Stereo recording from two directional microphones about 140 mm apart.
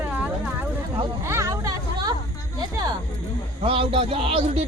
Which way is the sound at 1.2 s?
20° right (ahead or behind).